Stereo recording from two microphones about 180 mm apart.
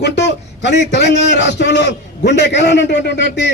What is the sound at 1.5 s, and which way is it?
A man's voice, 75° left (ahead or behind).